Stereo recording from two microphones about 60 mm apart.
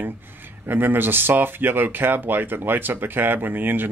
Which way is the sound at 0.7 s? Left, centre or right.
Right.